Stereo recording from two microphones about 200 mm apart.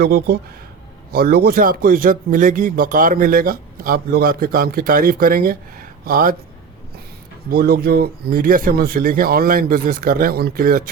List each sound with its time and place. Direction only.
0.0 s a man's voice: 50° right (ahead or behind)
7.5 s a man's voice: 50° right (ahead or behind)